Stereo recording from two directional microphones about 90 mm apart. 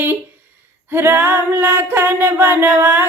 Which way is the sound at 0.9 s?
25° right (ahead or behind).